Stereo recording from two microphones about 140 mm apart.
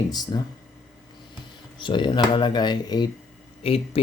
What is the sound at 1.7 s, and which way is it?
Speech, 35° left (ahead or behind).